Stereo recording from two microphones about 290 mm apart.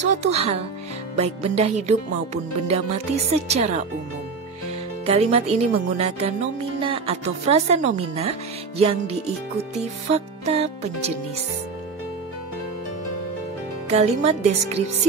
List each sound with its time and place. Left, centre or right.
0.2 s a woman's voice: right
5.0 s a woman's voice: right
13.8 s a woman's voice: right